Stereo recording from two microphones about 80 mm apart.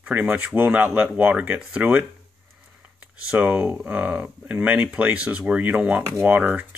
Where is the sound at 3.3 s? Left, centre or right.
Centre.